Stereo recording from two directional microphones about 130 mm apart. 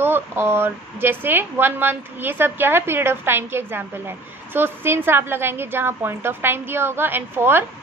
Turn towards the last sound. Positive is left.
turn(degrees=-15)  # may be behind; listen again after turning